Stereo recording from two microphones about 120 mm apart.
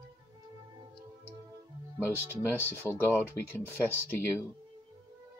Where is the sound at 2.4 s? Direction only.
15° left (ahead or behind).